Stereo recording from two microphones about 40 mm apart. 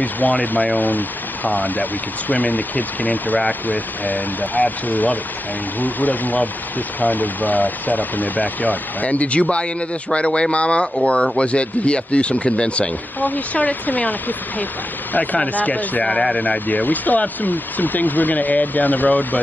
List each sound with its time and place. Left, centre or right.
0.0 s speech: left
13.2 s speech: left
16.0 s speech: centre
16.3 s speech: left